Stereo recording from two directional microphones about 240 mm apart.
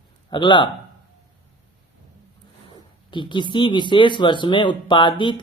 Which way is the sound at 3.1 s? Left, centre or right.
Centre.